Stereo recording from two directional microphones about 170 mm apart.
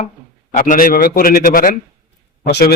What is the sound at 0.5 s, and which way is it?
A man's voice, 55° left (ahead or behind).